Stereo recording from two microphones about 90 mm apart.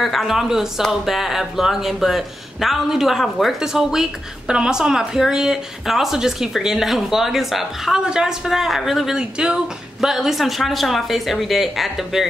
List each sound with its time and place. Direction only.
0.0 s speech: centre (ahead or behind)